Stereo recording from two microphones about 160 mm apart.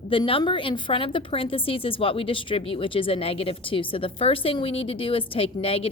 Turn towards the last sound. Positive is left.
turn(degrees=35)  # may be behind; listen again after turning